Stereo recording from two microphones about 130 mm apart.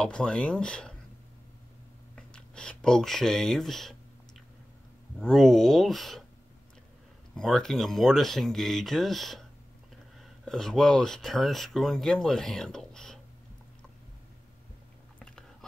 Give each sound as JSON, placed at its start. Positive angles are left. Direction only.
{"t": 0.0, "sound": "speech", "side_deg": 5}
{"t": 2.1, "sound": "speech", "side_deg": 5}
{"t": 5.2, "sound": "speech", "side_deg": 0}
{"t": 7.3, "sound": "speech", "side_deg": 5}
{"t": 10.4, "sound": "speech", "side_deg": 5}